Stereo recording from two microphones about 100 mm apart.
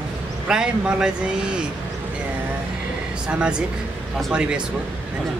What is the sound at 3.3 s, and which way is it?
A man's voice, 10° right (ahead or behind).